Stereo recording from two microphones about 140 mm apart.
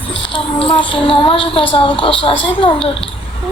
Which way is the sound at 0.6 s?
40° left (ahead or behind).